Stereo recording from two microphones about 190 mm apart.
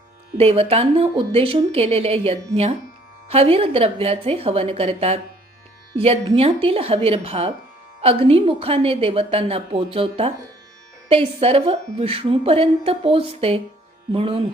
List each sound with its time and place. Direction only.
0.3 s a woman's voice: 30° right (ahead or behind)